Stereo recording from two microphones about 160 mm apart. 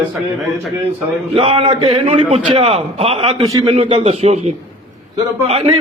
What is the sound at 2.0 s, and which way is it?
A man's voice, 45° right (ahead or behind).